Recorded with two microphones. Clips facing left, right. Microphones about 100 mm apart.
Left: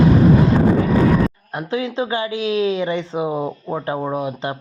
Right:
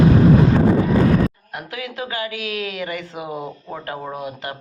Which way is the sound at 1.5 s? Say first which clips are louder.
Left 8 dB; 30° left (ahead or behind).